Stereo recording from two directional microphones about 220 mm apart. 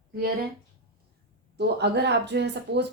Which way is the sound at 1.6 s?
50° right (ahead or behind).